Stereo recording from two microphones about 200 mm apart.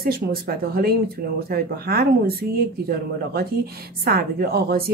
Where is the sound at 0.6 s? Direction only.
50° right (ahead or behind).